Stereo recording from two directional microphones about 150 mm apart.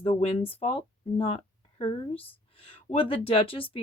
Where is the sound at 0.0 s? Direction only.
45° left (ahead or behind).